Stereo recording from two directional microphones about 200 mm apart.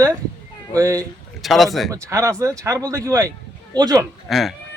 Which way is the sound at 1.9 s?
15° right (ahead or behind).